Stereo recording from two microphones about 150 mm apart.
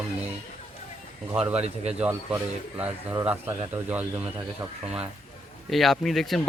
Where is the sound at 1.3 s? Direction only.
10° right (ahead or behind).